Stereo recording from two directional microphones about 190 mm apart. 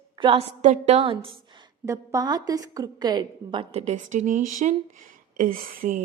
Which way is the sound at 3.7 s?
35° right (ahead or behind).